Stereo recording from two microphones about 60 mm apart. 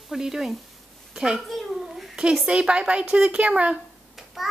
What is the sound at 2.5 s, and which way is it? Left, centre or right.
Speech, centre.